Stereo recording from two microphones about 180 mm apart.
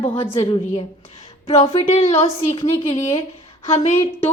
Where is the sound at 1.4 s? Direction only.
35° left (ahead or behind).